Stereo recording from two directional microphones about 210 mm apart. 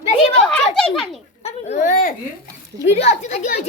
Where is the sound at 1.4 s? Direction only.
35° left (ahead or behind).